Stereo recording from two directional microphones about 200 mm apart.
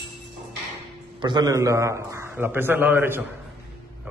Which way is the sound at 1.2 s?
20° right (ahead or behind).